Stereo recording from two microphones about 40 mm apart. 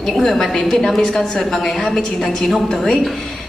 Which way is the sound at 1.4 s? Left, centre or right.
Centre.